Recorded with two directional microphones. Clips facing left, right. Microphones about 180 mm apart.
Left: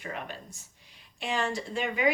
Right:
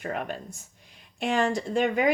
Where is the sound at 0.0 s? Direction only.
50° right (ahead or behind).